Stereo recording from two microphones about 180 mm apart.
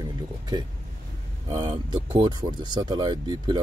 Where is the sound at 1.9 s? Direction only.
25° right (ahead or behind).